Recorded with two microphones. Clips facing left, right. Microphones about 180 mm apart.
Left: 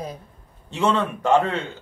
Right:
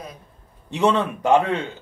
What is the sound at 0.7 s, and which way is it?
Speech, 15° right (ahead or behind).